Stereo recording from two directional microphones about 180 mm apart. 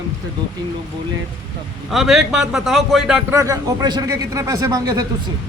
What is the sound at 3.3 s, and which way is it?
Speech, 20° right (ahead or behind).